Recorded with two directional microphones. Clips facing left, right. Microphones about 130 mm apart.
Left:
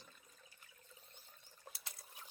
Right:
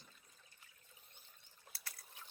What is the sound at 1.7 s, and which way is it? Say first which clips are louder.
Liquid: left 6 dB; 40° left (ahead or behind).